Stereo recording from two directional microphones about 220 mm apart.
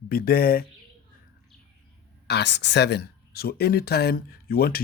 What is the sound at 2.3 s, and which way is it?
A man's voice, 50° left (ahead or behind).